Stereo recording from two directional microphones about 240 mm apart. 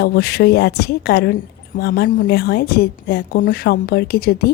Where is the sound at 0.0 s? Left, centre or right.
Left.